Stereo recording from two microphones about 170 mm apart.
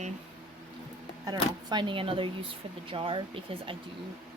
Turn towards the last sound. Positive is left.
turn(degrees=-30)  # may be behind; listen again after turning